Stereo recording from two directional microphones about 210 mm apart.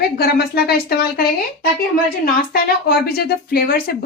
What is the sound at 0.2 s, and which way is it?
Speech, 45° left (ahead or behind).